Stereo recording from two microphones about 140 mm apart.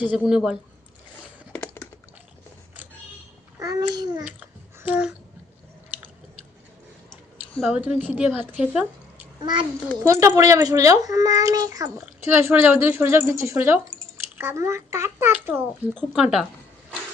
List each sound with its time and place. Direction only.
0.0 s a woman's voice: 10° right (ahead or behind)
1.6 s typing: 15° left (ahead or behind)
3.6 s a child's voice: 25° right (ahead or behind)
4.2 s babbling: 10° right (ahead or behind)
7.7 s a woman's voice: 10° right (ahead or behind)
9.4 s a child's voice: 30° right (ahead or behind)
10.0 s a child's voice: 20° right (ahead or behind)
16.1 s speech: 5° right (ahead or behind)